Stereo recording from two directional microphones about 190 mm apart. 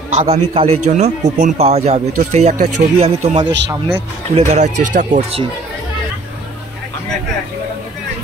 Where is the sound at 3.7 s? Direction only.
15° right (ahead or behind).